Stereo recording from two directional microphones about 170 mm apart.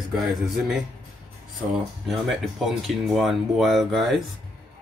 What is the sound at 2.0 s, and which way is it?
Speech, centre (ahead or behind).